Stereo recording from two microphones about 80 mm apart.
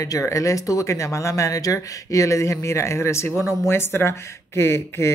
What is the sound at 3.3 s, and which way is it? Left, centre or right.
Speech, centre.